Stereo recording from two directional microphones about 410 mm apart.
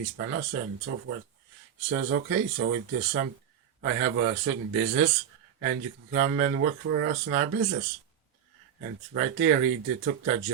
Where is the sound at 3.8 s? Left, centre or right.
Right.